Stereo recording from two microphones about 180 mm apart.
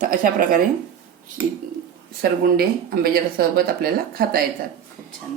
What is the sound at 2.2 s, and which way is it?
Speech, 60° right (ahead or behind).